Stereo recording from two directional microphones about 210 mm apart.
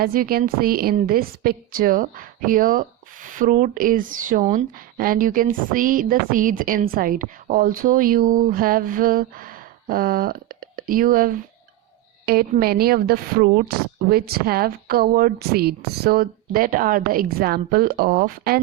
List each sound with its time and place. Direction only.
0.0 s a woman's voice: 45° right (ahead or behind)